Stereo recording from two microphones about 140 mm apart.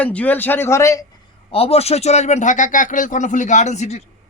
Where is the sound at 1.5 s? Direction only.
45° left (ahead or behind).